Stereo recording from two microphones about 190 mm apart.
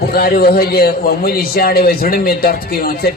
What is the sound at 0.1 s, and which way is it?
A man's voice, 55° left (ahead or behind).